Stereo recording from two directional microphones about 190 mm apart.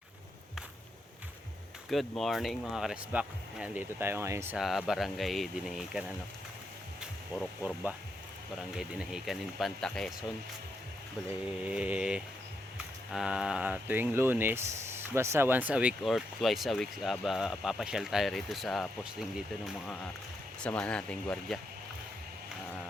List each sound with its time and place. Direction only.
1.9 s speech: centre (ahead or behind)
4.5 s speech: centre (ahead or behind)
11.6 s speech: 5° right (ahead or behind)
20.6 s speech: 5° left (ahead or behind)